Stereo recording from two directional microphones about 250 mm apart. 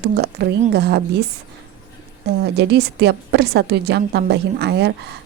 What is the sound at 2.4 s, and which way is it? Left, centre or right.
Speech, right.